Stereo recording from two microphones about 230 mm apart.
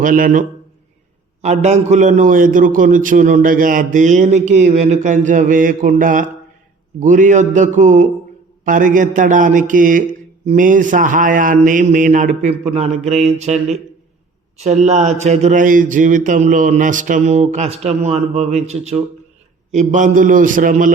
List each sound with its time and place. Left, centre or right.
0.0 s a man's voice: right
13.1 s mantra: right
14.6 s a man's voice: right